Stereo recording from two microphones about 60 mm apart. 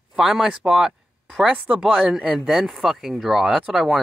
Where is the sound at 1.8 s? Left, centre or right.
Centre.